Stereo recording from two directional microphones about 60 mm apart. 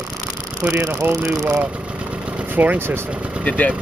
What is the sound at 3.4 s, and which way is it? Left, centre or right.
Speech, left.